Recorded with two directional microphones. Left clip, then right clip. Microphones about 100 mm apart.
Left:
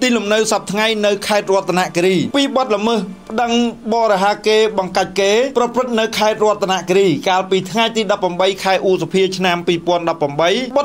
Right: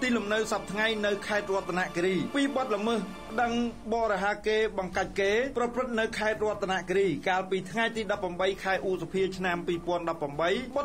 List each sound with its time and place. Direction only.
0.0 s speech: 20° left (ahead or behind)